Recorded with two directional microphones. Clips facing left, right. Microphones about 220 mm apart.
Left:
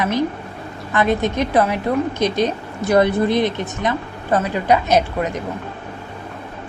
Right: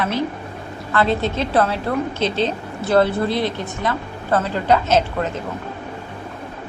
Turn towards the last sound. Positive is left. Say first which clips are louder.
# left 1 dB
turn(degrees=15)  # may be behind; listen again after turning